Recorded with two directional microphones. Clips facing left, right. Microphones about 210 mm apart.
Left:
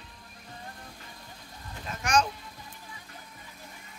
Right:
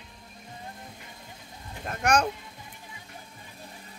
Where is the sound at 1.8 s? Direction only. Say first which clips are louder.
Right 2 dB; 60° right (ahead or behind).